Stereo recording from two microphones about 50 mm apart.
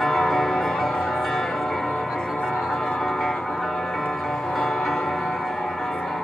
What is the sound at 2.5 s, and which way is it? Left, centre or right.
Music, centre.